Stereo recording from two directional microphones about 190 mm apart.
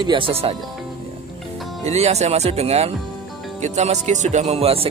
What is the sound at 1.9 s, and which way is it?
Speech, 35° right (ahead or behind).